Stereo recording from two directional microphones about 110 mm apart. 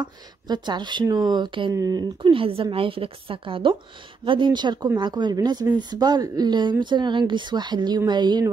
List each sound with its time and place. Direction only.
0.0 s speech: 40° right (ahead or behind)
1.7 s speech: 30° right (ahead or behind)
2.3 s a woman's voice: 55° right (ahead or behind)